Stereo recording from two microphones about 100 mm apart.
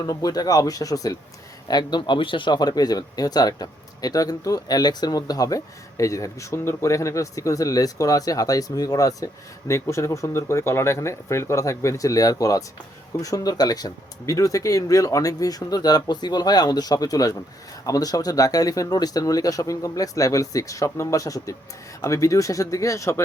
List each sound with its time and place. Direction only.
0.0 s speech: 40° left (ahead or behind)